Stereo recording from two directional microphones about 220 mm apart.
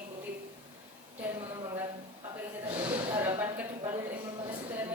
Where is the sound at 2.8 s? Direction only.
10° right (ahead or behind).